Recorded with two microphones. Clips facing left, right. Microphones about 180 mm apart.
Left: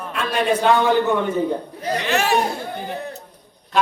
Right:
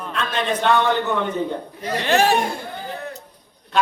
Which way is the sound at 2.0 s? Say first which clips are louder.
Right 3 dB; 35° right (ahead or behind).